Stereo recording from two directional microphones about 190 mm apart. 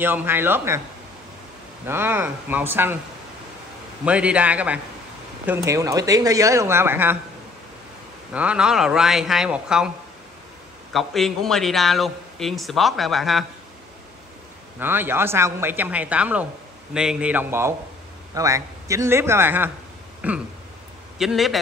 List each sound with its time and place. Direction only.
0.0 s speech: 10° right (ahead or behind)
1.9 s speech: 10° right (ahead or behind)
4.0 s speech: 5° right (ahead or behind)
8.3 s a man's voice: 5° right (ahead or behind)
10.9 s a man's voice: centre (ahead or behind)
14.8 s speech: 10° right (ahead or behind)
20.2 s a sound: 5° right (ahead or behind)
21.2 s a man's voice: centre (ahead or behind)